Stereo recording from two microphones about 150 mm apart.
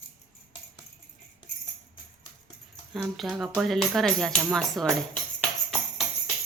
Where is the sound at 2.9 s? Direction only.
Centre (ahead or behind).